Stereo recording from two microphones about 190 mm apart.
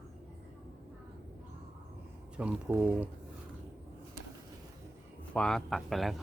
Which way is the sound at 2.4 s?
10° right (ahead or behind).